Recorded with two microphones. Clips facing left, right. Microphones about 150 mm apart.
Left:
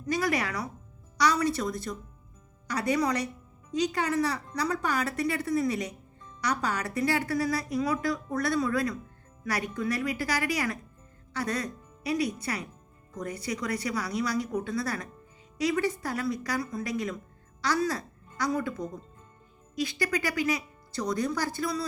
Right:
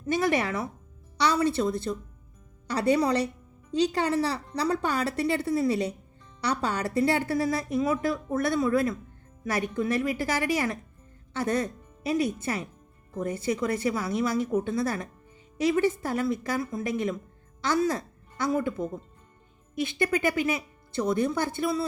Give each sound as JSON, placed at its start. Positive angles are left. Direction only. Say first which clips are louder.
{"t": 0.0, "sound": "a woman's voice", "louder": "right 3 dB", "side_deg": -25}